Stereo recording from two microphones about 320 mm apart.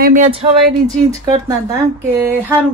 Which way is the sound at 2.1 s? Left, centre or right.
Centre.